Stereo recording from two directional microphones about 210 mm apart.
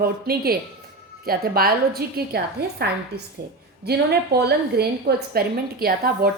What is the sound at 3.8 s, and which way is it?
A woman's voice, 50° right (ahead or behind).